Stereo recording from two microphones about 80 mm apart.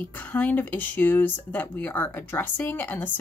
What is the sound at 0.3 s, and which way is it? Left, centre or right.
A woman's voice, left.